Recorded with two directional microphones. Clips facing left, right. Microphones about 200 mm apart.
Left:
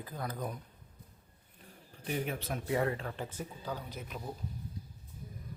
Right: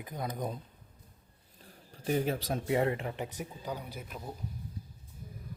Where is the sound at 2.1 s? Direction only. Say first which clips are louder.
Right 5 dB; 35° right (ahead or behind); by 4.3 s 5° right (ahead or behind).